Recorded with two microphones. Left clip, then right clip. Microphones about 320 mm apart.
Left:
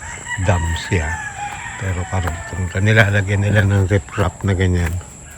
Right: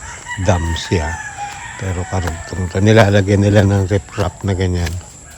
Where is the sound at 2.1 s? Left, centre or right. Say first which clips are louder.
Right 1 dB; centre.